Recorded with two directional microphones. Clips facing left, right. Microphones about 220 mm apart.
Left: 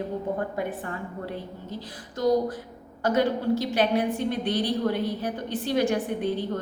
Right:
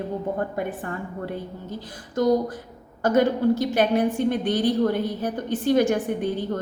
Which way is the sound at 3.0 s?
50° right (ahead or behind).